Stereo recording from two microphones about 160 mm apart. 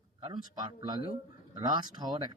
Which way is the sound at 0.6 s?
30° right (ahead or behind).